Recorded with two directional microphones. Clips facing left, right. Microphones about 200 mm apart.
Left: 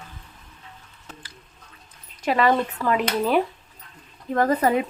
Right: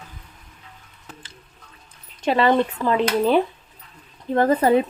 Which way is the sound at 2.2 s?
25° right (ahead or behind).